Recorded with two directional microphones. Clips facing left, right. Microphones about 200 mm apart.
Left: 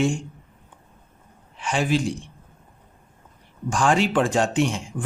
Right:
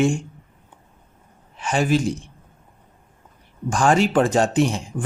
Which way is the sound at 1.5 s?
45° right (ahead or behind).